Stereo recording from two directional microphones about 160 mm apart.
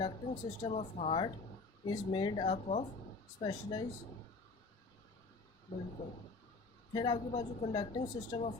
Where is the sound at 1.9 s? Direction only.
25° left (ahead or behind).